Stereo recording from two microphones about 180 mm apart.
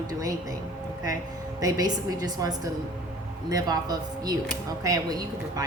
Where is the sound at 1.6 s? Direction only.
20° right (ahead or behind).